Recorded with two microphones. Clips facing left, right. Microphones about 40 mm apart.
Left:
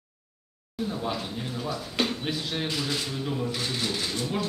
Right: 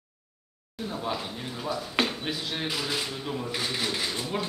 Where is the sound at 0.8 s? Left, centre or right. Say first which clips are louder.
Even; centre.